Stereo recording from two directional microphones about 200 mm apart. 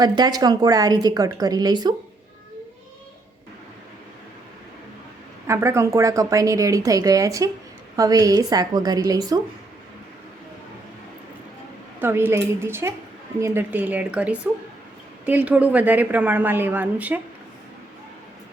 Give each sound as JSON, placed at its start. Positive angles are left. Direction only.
{"t": 0.0, "sound": "a woman's voice", "side_deg": -20}
{"t": 5.5, "sound": "a woman's voice", "side_deg": -15}
{"t": 11.9, "sound": "a woman's voice", "side_deg": -10}